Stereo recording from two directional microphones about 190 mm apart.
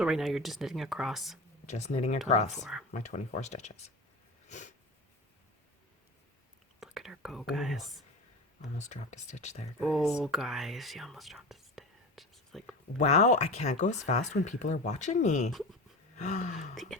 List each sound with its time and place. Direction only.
0.0 s speech: centre (ahead or behind)
1.6 s speech: 35° left (ahead or behind)
4.4 s a sound: 40° left (ahead or behind)
6.7 s speech: centre (ahead or behind)
8.8 s speech: 40° left (ahead or behind)
9.8 s speech: centre (ahead or behind)
13.0 s speech: 35° left (ahead or behind)